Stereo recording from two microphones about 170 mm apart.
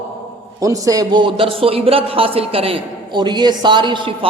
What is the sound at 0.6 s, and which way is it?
A man's voice, 20° right (ahead or behind).